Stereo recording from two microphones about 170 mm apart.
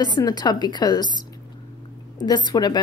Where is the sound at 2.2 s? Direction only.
25° left (ahead or behind).